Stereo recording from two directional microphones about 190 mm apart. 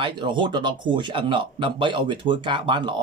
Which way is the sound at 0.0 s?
25° right (ahead or behind).